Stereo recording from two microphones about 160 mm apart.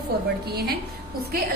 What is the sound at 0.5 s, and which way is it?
Speech, 90° right.